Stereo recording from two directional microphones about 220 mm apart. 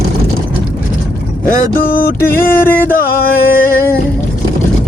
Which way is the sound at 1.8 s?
40° left (ahead or behind).